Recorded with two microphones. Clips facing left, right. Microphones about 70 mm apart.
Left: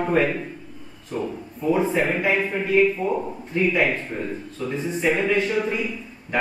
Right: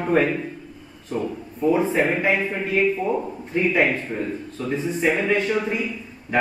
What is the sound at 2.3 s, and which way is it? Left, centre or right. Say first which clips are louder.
A man's voice: left 1 dB; centre.